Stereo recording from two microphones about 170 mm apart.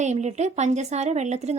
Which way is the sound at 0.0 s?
45° right (ahead or behind).